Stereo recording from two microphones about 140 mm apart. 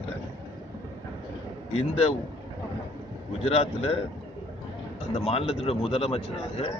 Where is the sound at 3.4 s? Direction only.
45° left (ahead or behind).